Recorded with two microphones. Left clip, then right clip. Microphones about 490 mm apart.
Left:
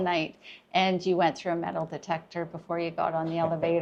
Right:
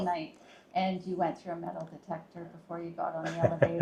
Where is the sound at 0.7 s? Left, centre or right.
Left.